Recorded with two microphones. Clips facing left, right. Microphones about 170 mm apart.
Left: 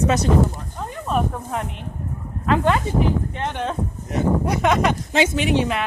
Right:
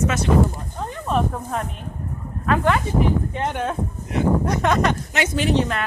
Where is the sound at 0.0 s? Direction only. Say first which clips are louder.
Left 3 dB; 35° left (ahead or behind).